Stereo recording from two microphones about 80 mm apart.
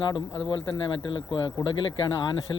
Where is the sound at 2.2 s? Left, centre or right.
Left.